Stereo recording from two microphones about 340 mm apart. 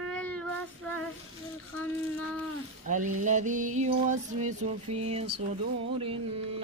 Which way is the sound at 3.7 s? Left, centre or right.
Right.